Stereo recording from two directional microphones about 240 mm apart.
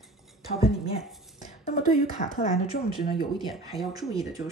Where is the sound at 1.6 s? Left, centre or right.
Left.